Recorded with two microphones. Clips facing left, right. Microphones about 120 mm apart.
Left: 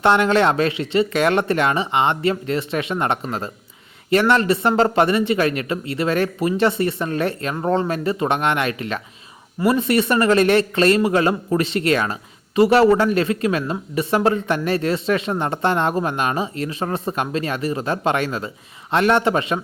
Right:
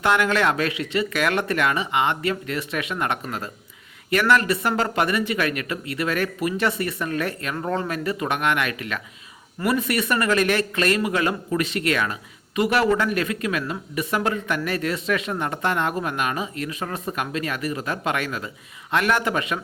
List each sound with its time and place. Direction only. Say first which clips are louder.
0.0 s speech: left 5 dB; 30° left (ahead or behind)